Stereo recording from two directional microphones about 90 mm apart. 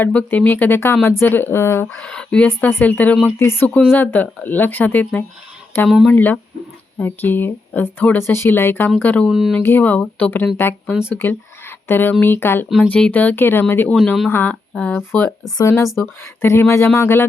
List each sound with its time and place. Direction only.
0.0 s speech: 20° left (ahead or behind)
2.0 s speech: 10° left (ahead or behind)
2.5 s speech: 25° left (ahead or behind)
9.2 s speech: 5° right (ahead or behind)
9.6 s speech: 20° left (ahead or behind)
12.6 s speech: centre (ahead or behind)
12.9 s speech: 15° left (ahead or behind)
13.9 s speech: 5° left (ahead or behind)
14.3 s speech: 25° left (ahead or behind)
15.5 s speech: 35° left (ahead or behind)